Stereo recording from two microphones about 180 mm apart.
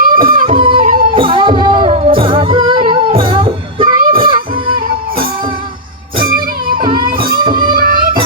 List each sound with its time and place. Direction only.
0.0 s music: 50° right (ahead or behind)
0.4 s music: 30° right (ahead or behind)
0.8 s music: 50° right (ahead or behind)
1.1 s music: 30° right (ahead or behind)
6.2 s music: 55° right (ahead or behind)
6.7 s music: 25° right (ahead or behind)
7.6 s music: 55° right (ahead or behind)